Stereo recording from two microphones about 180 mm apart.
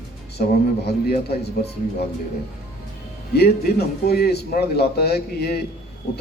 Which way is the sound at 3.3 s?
65° left (ahead or behind).